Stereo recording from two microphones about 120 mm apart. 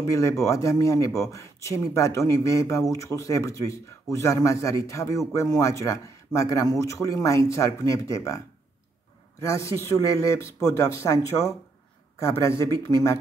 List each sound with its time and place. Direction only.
0.1 s speech: 25° left (ahead or behind)
9.4 s speech: 25° left (ahead or behind)